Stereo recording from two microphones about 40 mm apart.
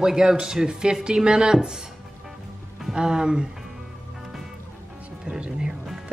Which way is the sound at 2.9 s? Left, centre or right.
Centre.